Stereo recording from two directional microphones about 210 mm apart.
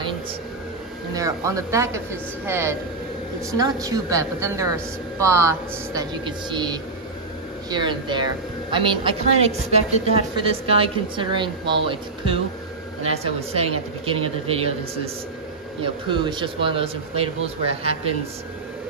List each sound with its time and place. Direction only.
1.1 s a woman's voice: 15° right (ahead or behind)
15.8 s a woman's voice: 20° right (ahead or behind)